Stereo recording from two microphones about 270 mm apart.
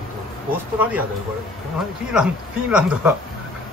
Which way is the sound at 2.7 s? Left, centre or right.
Centre.